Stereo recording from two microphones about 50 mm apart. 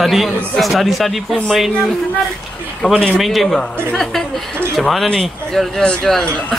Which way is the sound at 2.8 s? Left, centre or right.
Left.